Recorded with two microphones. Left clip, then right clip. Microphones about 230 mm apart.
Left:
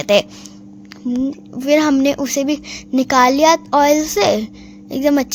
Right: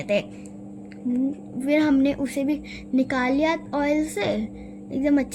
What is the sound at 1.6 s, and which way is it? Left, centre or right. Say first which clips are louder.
A woman's voice: left 7 dB; left.